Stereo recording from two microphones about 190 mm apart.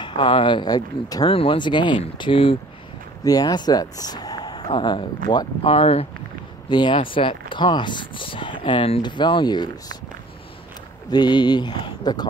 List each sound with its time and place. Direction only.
0.0 s speech: 25° left (ahead or behind)
11.1 s speech: 20° left (ahead or behind)